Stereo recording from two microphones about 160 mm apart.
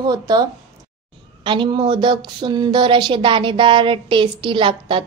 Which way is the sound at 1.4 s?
30° right (ahead or behind).